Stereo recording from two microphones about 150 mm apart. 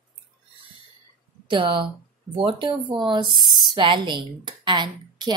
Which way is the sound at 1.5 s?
35° right (ahead or behind).